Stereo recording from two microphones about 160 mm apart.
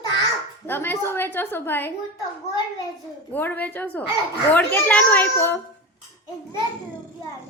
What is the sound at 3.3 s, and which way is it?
A woman's voice, 10° left (ahead or behind).